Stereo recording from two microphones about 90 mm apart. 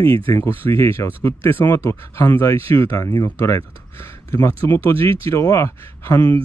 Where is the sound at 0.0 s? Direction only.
30° left (ahead or behind).